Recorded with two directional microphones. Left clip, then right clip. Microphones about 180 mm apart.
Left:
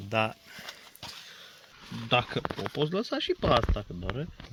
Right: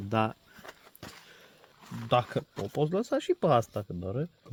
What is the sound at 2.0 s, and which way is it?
Speech, 90° right.